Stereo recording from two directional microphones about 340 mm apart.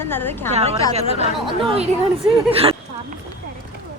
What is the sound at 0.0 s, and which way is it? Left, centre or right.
Speech, centre.